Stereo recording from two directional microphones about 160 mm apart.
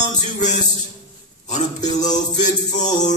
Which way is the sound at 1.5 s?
50° left (ahead or behind).